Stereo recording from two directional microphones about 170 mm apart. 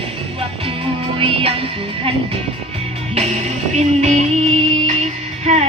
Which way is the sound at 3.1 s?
40° right (ahead or behind).